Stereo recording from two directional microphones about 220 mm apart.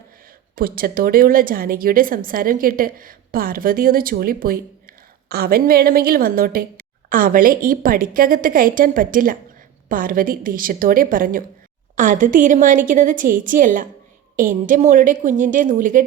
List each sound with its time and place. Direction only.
0.3 s speech: 40° right (ahead or behind)